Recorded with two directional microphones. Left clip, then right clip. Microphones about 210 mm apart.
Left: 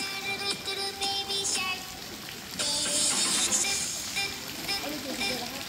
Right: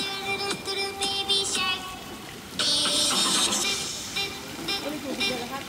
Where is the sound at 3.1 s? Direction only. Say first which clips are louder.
Right 4 dB; 35° right (ahead or behind).